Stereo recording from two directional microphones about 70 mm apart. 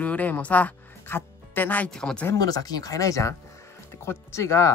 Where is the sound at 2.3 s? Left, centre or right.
Left.